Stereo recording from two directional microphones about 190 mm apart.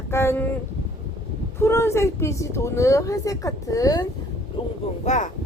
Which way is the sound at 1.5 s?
15° left (ahead or behind).